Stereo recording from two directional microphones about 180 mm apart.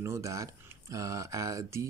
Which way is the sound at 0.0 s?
15° right (ahead or behind).